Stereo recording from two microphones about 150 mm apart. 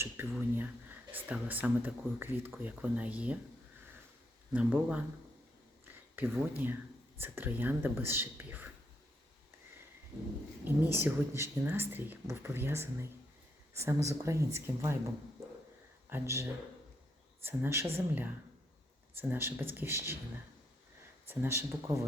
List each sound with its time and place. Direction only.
0.0 s speech: 15° right (ahead or behind)
4.5 s speech: 10° right (ahead or behind)
6.1 s speech: 15° right (ahead or behind)
10.8 s speech: 15° right (ahead or behind)
16.0 s speech: 15° right (ahead or behind)
21.2 s speech: 15° right (ahead or behind)